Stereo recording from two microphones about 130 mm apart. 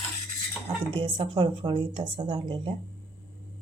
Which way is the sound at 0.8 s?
45° right (ahead or behind).